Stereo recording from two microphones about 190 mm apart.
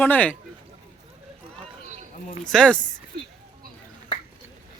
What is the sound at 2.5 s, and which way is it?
Speech, 5° left (ahead or behind).